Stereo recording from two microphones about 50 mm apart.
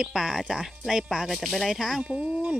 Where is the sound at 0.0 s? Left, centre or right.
Centre.